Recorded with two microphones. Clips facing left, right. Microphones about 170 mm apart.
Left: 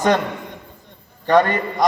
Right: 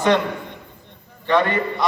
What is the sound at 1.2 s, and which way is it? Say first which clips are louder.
Speech: left 3 dB; 40° left (ahead or behind).